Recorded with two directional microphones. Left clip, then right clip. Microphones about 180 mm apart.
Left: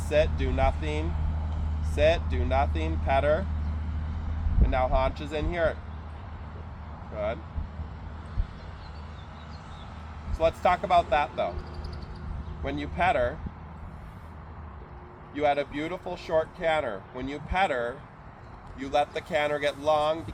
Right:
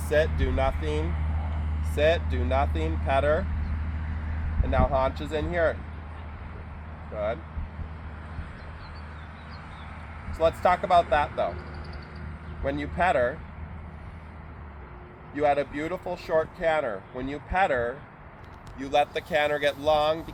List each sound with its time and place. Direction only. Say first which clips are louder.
0.1 s speech: right 1 dB; 55° right (ahead or behind)
4.7 s speech: right 1 dB; 45° right (ahead or behind)
10.3 s speech: right 1 dB; 45° right (ahead or behind)
12.6 s speech: right 1 dB; 45° right (ahead or behind)
15.4 s speech: right 2 dB; 45° right (ahead or behind)
18.8 s speech: right 2 dB; 55° right (ahead or behind)